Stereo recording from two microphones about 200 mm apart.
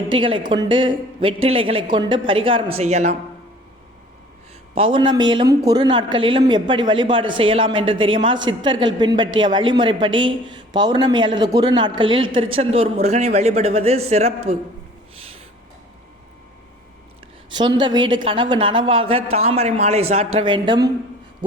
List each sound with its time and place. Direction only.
0.1 s a man's voice: 25° right (ahead or behind)
4.7 s a man's voice: 25° right (ahead or behind)
17.5 s a man's voice: 20° right (ahead or behind)